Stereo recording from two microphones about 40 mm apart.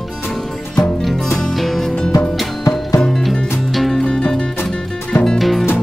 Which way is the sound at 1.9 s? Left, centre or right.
Left.